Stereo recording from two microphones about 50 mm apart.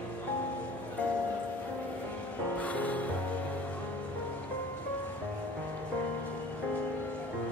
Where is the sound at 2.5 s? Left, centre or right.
Left.